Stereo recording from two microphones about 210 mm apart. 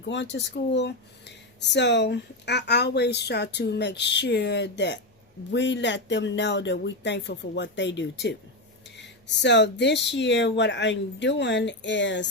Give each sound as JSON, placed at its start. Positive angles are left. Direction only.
{"t": 0.0, "sound": "speech", "side_deg": 60}